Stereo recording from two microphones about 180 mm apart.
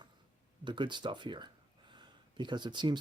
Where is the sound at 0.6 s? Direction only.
25° right (ahead or behind).